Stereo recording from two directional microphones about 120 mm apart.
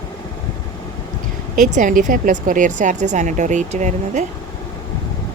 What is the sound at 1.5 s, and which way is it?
A woman's voice, 90° right.